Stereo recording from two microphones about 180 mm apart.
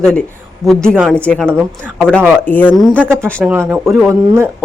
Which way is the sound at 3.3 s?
10° right (ahead or behind).